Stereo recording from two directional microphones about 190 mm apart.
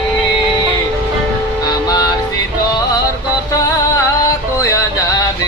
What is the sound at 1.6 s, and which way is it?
Vehicle, 20° left (ahead or behind).